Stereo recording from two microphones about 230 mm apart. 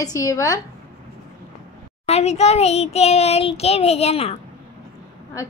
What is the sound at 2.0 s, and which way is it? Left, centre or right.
Child singing, left.